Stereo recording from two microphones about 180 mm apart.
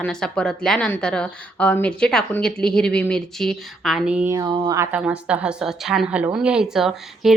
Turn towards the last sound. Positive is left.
turn(degrees=0)  # may be behind; listen again after turning